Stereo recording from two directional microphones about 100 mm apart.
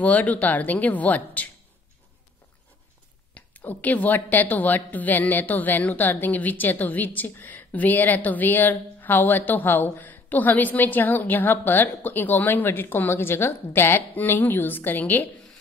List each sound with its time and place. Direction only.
0.0 s a woman's voice: 15° left (ahead or behind)
3.3 s a woman's voice: 15° left (ahead or behind)